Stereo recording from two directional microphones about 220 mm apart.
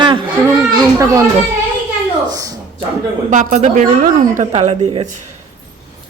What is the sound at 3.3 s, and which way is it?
Speech, 35° right (ahead or behind).